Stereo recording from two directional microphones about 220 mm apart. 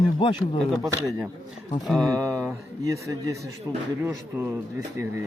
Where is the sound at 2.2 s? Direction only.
15° right (ahead or behind).